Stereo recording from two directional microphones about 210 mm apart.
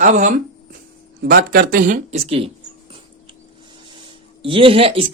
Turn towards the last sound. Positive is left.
turn(degrees=-25)  # may be behind; listen again after turning